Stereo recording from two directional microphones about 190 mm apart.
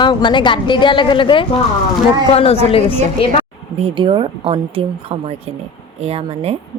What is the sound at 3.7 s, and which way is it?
Speech, 30° right (ahead or behind).